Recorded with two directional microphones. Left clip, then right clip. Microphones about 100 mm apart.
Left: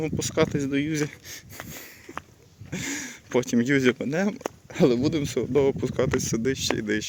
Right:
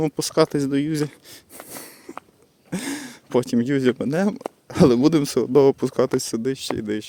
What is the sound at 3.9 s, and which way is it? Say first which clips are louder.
Speech: right 4 dB; 60° right (ahead or behind).